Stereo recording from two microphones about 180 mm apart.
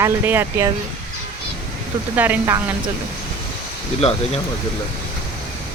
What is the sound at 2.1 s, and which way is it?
Speech, 10° right (ahead or behind).